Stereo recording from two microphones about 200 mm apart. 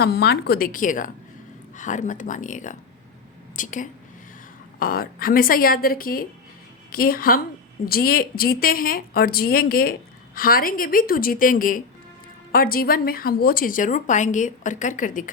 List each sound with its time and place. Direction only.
0.0 s a woman's voice: 55° left (ahead or behind)